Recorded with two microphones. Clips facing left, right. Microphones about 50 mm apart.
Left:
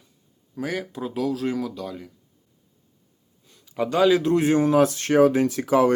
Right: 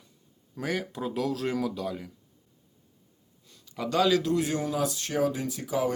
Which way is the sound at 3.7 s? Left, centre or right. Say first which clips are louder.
Left 5 dB; left.